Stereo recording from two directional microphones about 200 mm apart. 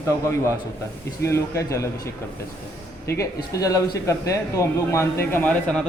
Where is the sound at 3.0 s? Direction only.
15° left (ahead or behind).